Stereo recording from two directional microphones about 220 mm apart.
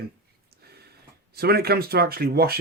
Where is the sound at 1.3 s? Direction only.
45° right (ahead or behind).